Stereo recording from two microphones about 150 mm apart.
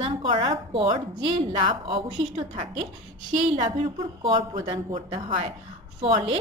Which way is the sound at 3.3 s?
55° right (ahead or behind).